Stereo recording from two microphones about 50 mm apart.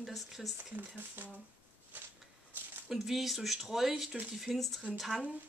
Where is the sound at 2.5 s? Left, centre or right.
Right.